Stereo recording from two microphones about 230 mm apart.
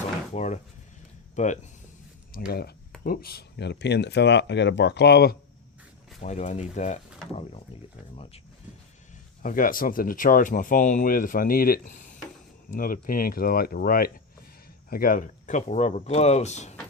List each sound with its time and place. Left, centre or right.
0.3 s speech: left
2.5 s speech: left
6.2 s speech: left
8.1 s speech: left
9.4 s speech: left